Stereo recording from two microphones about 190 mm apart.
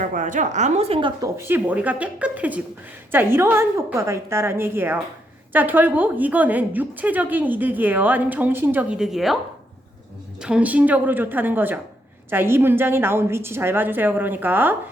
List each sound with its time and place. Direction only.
0.0 s speech: 45° right (ahead or behind); by 1.3 s 25° right (ahead or behind)
1.4 s a woman's voice: 10° right (ahead or behind)
10.4 s a woman's voice: 5° right (ahead or behind)